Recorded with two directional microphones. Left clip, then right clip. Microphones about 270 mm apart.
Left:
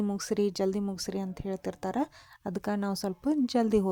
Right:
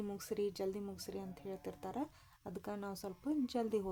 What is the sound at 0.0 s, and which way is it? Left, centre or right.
Speech, left.